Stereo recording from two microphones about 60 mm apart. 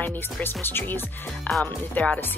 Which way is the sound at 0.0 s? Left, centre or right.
Left.